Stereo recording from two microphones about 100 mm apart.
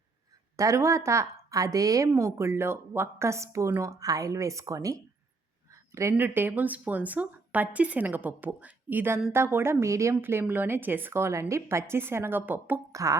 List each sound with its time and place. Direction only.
0.5 s a woman's voice: 30° right (ahead or behind)
12.9 s speech: 35° right (ahead or behind)